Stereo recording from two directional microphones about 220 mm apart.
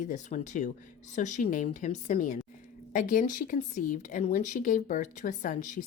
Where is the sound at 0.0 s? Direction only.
35° left (ahead or behind).